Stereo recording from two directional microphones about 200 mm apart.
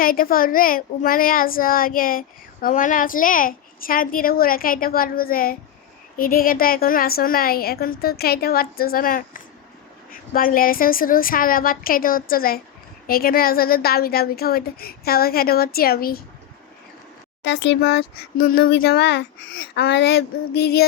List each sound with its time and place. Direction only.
0.0 s a child's voice: 45° left (ahead or behind)
17.4 s a child's voice: 60° left (ahead or behind)